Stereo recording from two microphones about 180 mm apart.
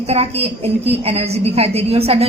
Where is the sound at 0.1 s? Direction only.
35° right (ahead or behind).